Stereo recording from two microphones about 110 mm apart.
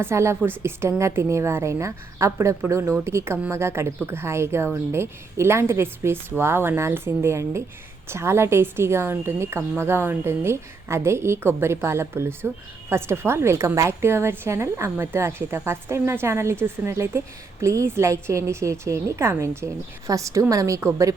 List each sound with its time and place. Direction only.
0.0 s a woman's voice: 25° right (ahead or behind)